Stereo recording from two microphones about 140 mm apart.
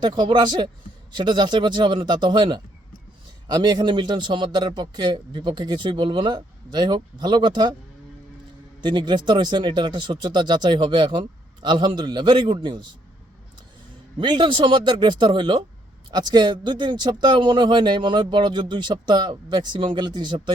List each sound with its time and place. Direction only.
0.0 s speech: 30° right (ahead or behind)
8.8 s speech: 35° right (ahead or behind)
14.2 s speech: 35° right (ahead or behind)